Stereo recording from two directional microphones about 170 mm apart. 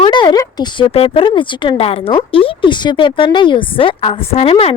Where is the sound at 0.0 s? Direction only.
25° left (ahead or behind).